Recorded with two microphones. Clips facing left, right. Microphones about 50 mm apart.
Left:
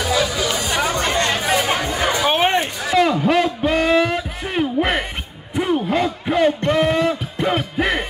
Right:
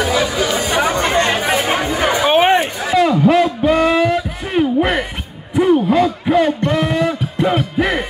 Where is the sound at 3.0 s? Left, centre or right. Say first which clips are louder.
Right 4 dB; centre.